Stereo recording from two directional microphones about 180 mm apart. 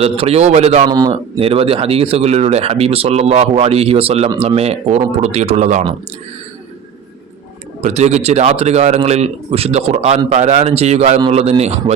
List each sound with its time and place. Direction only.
0.0 s speech: 35° right (ahead or behind)
0.9 s a man's voice: 20° right (ahead or behind); by 5.9 s 40° right (ahead or behind)
7.8 s speech: 40° right (ahead or behind)